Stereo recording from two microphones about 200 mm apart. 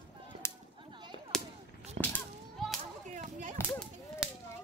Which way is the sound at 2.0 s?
40° right (ahead or behind).